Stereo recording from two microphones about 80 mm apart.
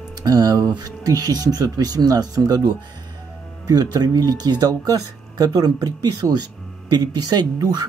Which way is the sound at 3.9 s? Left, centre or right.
Right.